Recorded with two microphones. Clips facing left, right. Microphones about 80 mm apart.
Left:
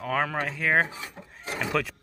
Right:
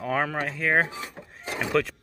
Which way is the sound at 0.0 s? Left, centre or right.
Centre.